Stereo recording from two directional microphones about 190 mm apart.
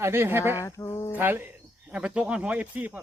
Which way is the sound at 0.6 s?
15° left (ahead or behind).